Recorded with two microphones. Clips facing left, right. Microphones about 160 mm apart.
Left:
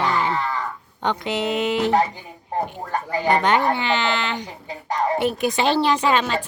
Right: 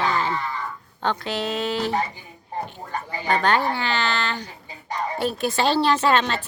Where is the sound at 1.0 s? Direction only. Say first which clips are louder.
Left 2 dB; 20° left (ahead or behind).